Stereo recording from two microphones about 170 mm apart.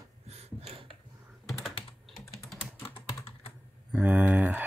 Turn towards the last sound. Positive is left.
turn(degrees=-10)  # may be behind; listen again after turning